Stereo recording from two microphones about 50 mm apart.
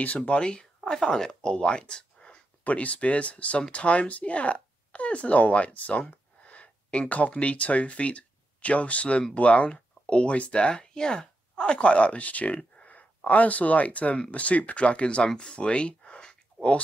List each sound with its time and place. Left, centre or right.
0.0 s speech: left
2.6 s speech: left